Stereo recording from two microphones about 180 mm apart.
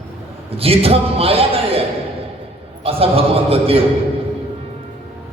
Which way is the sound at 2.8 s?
35° right (ahead or behind).